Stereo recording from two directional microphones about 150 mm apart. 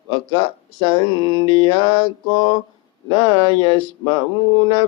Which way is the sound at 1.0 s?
30° right (ahead or behind).